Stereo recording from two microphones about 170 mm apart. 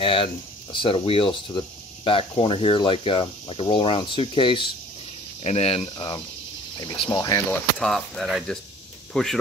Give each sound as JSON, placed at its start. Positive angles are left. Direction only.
{"t": 0.0, "sound": "speech", "side_deg": 30}
{"t": 5.9, "sound": "speech", "side_deg": 25}
{"t": 7.8, "sound": "speech", "side_deg": 5}